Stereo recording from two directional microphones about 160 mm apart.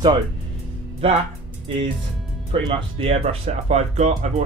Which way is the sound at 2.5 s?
35° right (ahead or behind).